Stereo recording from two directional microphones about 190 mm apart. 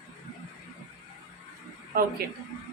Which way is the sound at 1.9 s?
50° right (ahead or behind).